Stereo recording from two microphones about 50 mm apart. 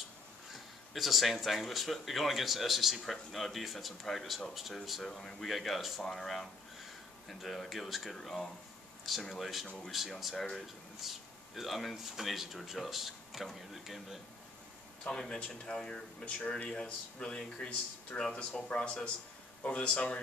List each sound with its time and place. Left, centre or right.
0.9 s speech: centre
15.0 s speech: centre
18.8 s speech: centre
19.6 s speech: left